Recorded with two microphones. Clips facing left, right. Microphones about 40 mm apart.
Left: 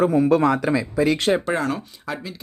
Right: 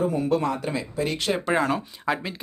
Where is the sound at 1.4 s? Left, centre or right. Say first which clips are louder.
Even; centre.